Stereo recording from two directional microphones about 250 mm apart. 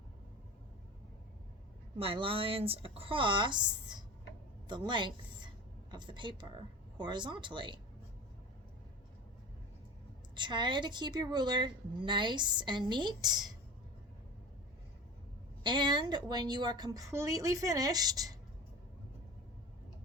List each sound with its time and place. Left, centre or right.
2.0 s a woman's voice: right
10.3 s speech: centre
15.6 s speech: centre